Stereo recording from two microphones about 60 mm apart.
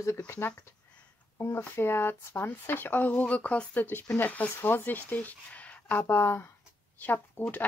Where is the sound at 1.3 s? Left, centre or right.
Left.